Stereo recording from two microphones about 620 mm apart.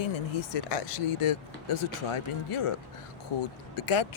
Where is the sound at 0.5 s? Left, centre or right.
Left.